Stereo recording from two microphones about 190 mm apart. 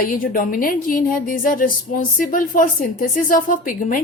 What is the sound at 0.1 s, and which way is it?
A woman's voice, 45° left (ahead or behind).